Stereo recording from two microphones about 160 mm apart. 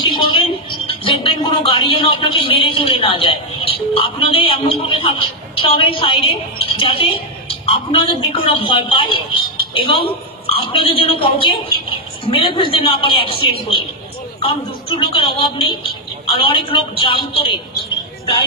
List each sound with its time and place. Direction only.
0.0 s a woman's voice: 35° left (ahead or behind)